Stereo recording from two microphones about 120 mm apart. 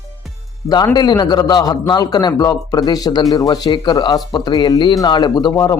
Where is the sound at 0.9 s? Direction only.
35° left (ahead or behind).